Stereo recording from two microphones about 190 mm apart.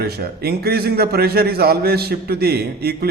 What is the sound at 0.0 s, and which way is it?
A man's voice, 55° right (ahead or behind).